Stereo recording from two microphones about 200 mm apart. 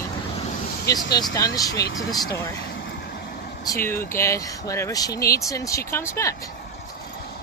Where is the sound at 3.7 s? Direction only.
10° left (ahead or behind).